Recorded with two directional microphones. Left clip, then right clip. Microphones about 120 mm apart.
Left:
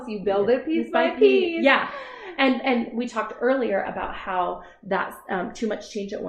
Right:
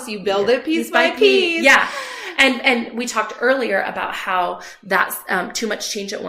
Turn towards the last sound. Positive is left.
turn(degrees=-25)  # may be behind; listen again after turning